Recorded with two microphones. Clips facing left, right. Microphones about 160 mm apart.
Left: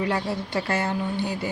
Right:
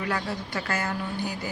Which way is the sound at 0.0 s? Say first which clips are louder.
Left 4 dB; 25° left (ahead or behind).